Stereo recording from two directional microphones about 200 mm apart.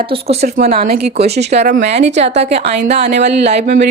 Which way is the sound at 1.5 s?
35° right (ahead or behind).